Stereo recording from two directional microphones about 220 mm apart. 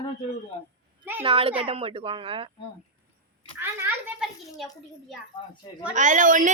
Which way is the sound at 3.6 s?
5° right (ahead or behind).